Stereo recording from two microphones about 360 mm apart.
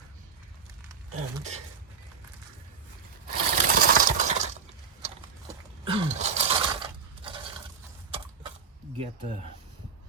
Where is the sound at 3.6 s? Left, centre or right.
Right.